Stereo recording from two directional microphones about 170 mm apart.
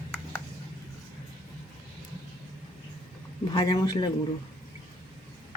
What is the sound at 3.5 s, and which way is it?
Speech, 25° left (ahead or behind).